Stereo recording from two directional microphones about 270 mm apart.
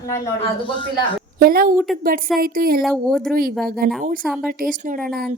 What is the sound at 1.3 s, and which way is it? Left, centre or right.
A woman's voice, right.